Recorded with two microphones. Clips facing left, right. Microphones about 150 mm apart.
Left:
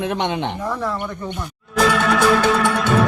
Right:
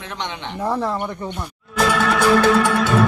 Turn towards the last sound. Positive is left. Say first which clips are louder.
# right 1 dB
turn(degrees=0)  # may be behind; listen again after turning